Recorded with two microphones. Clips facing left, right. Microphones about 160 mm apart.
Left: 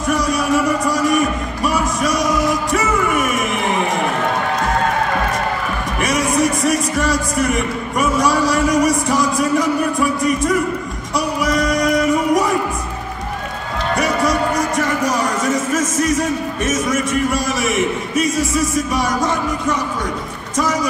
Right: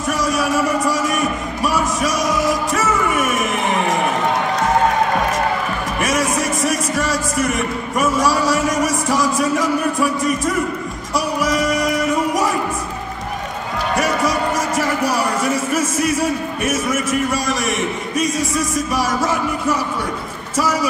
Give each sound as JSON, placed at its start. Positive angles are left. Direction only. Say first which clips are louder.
{"t": 0.1, "sound": "a sound", "louder": "left 2 dB", "side_deg": 0}
{"t": 5.9, "sound": "a man's voice", "louder": "left 2 dB", "side_deg": 0}
{"t": 11.1, "sound": "music", "louder": "left 1 dB", "side_deg": 0}
{"t": 13.9, "sound": "run", "louder": "left 1 dB", "side_deg": 0}
{"t": 15.7, "sound": "speech", "louder": "left 1 dB", "side_deg": -10}